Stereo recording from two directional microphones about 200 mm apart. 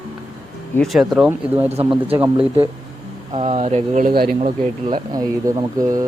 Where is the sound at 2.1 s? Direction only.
15° right (ahead or behind).